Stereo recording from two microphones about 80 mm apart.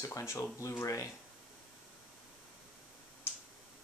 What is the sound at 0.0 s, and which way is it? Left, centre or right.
Speech, left.